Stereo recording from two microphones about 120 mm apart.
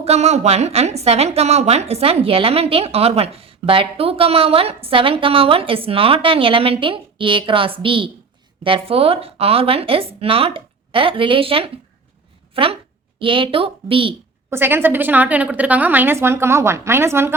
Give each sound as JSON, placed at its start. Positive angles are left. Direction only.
{"t": 0.0, "sound": "a woman's voice", "side_deg": -65}
{"t": 14.5, "sound": "a woman's voice", "side_deg": -20}